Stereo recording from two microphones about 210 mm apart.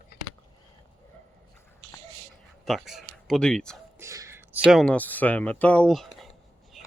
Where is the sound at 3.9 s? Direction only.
15° right (ahead or behind).